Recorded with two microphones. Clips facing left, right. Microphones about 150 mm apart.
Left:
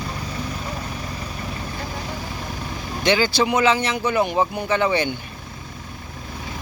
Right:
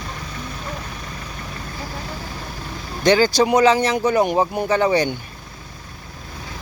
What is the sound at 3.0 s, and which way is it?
Speech, 40° right (ahead or behind).